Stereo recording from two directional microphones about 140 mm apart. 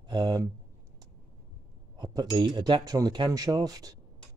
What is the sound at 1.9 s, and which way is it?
Speech, 30° right (ahead or behind).